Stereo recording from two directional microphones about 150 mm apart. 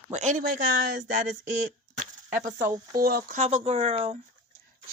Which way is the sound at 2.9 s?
75° right (ahead or behind).